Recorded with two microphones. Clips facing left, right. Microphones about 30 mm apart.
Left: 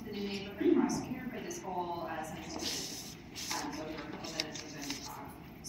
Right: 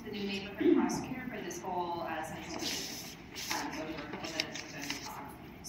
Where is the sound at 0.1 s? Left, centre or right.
Centre.